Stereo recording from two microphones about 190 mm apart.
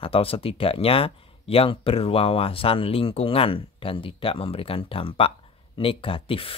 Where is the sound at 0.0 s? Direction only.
30° left (ahead or behind).